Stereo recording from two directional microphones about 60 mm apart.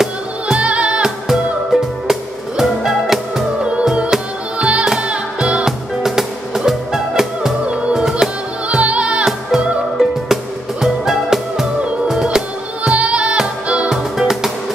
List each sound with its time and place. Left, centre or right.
0.6 s music: right
1.3 s music: centre
3.6 s music: centre
5.7 s music: centre
7.6 s music: centre
9.9 s music: centre